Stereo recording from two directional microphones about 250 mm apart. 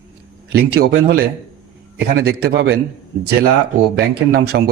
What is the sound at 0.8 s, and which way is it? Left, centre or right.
A man's voice, right.